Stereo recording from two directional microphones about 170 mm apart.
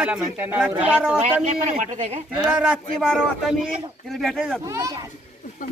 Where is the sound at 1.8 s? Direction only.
45° right (ahead or behind).